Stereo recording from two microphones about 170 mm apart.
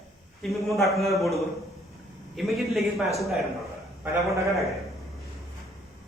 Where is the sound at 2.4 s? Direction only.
Centre (ahead or behind).